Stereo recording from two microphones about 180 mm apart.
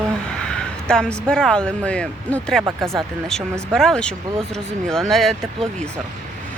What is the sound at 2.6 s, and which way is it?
Speech, 15° right (ahead or behind).